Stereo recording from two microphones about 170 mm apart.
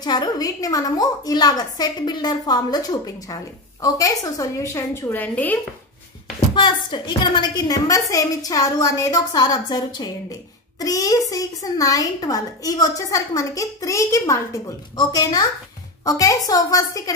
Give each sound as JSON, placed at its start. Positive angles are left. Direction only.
{"t": 0.0, "sound": "a woman's voice", "side_deg": 25}
{"t": 6.5, "sound": "a woman's voice", "side_deg": 25}